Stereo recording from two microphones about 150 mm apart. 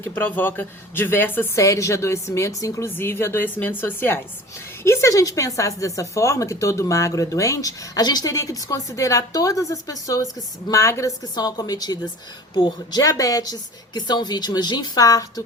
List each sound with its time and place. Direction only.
0.0 s speech: 15° left (ahead or behind)